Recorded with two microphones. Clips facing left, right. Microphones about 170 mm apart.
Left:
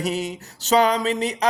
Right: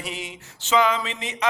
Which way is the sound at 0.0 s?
40° left (ahead or behind).